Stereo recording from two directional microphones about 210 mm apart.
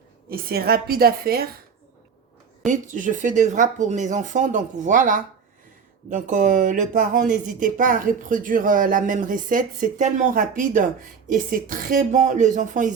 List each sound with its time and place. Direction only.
0.3 s a woman's voice: 45° right (ahead or behind)
2.6 s speech: 35° right (ahead or behind)